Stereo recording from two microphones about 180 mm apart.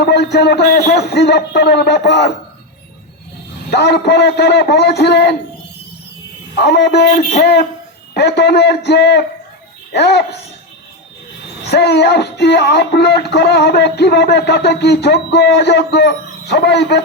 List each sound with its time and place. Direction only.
0.0 s music: 70° left (ahead or behind)
3.7 s music: 65° left (ahead or behind)
6.6 s music: 70° left (ahead or behind)
11.7 s music: 65° left (ahead or behind)